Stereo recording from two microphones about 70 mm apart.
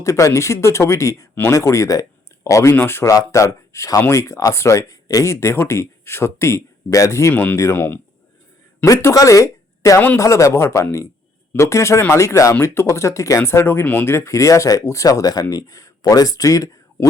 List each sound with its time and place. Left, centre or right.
0.0 s speech: left
2.7 s speech: left
3.1 s speech: left
13.8 s speech: left
14.1 s speech: left